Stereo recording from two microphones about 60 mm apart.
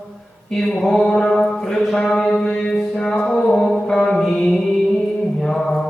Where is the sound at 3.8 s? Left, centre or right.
Centre.